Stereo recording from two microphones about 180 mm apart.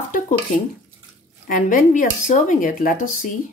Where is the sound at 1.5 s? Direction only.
45° left (ahead or behind).